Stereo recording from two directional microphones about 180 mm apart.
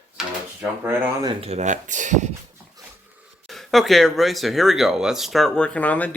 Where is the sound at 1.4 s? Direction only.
40° right (ahead or behind).